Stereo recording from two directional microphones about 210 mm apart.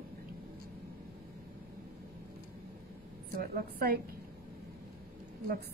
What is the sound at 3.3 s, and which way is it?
Speech, 45° right (ahead or behind).